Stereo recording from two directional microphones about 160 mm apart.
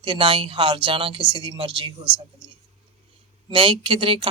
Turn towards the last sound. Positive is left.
turn(degrees=-35)  # may be behind; listen again after turning